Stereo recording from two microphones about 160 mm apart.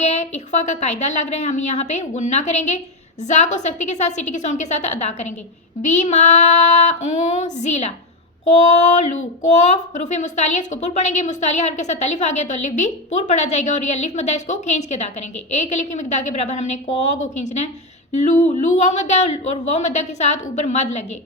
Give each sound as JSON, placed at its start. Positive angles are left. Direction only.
{"t": 0.0, "sound": "speech", "side_deg": 45}